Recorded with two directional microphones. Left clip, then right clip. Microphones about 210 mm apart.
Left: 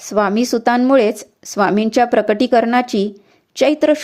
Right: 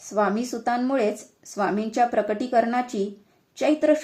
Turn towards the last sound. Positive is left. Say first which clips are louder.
# left 7 dB
turn(degrees=40)  # may be behind; listen again after turning